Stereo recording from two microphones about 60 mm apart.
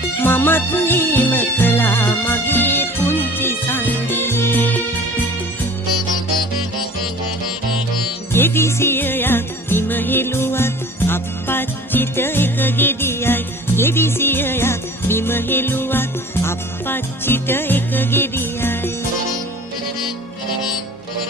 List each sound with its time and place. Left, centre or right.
0.2 s music: left
8.3 s music: left